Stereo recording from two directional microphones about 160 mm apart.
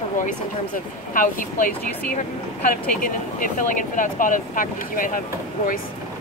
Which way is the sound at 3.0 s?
55° left (ahead or behind).